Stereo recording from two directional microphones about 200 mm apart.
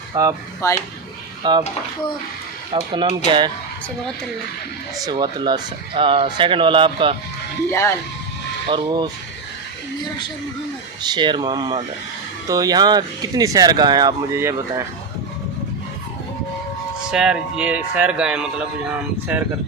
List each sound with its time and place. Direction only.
0.1 s speech: 20° right (ahead or behind)
0.6 s speech: 15° left (ahead or behind)
1.4 s speech: 20° right (ahead or behind)
2.7 s speech: 25° right (ahead or behind)
4.9 s speech: 20° right (ahead or behind)
8.6 s speech: 20° right (ahead or behind)
11.0 s speech: 20° right (ahead or behind)
17.1 s speech: 5° right (ahead or behind)